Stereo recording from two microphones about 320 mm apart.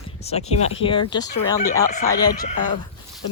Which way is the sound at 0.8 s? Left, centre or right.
Centre.